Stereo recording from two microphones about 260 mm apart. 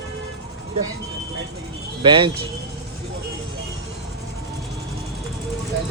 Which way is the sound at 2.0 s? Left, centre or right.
Centre.